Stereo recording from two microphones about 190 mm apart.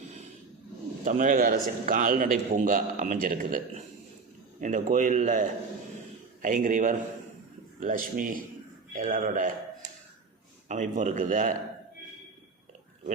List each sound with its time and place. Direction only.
1.0 s a man's voice: 45° right (ahead or behind)
10.7 s a man's voice: 40° right (ahead or behind)